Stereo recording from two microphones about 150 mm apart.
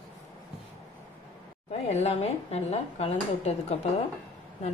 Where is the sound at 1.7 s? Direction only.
45° left (ahead or behind).